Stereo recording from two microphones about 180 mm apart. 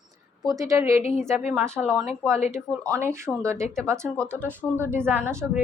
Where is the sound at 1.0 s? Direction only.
40° left (ahead or behind).